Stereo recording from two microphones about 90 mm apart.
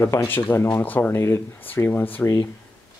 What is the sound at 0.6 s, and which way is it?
Speech, 20° left (ahead or behind).